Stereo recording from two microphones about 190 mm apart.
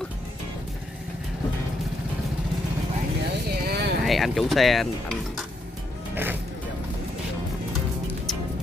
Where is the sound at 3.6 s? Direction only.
60° right (ahead or behind).